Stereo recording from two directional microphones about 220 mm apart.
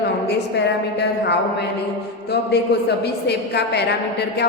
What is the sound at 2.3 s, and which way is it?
A woman's voice, 50° left (ahead or behind).